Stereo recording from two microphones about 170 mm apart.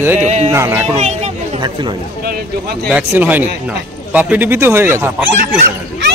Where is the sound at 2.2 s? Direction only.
60° right (ahead or behind).